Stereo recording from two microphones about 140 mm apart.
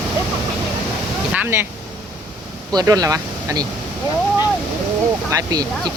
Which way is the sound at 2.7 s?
25° right (ahead or behind).